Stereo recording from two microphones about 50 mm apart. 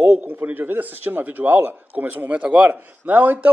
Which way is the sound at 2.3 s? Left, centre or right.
Right.